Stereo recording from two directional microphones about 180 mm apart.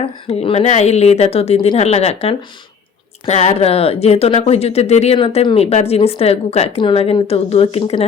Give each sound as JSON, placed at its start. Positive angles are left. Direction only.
{"t": 0.0, "sound": "speech", "side_deg": 30}